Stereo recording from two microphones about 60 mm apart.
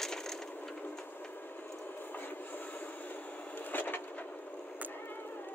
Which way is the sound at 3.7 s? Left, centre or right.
Left.